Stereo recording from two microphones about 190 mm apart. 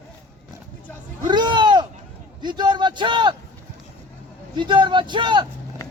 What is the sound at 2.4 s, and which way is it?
Speech, 25° right (ahead or behind).